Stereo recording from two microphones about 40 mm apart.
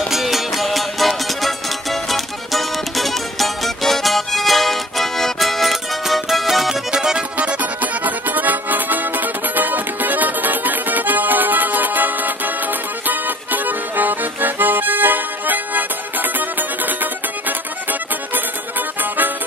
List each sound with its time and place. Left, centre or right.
0.1 s music: centre
6.9 s music: centre
7.3 s accordion: right
18.3 s music: right